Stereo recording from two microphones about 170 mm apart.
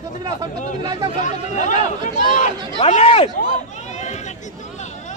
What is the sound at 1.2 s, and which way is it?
Speech, 45° left (ahead or behind).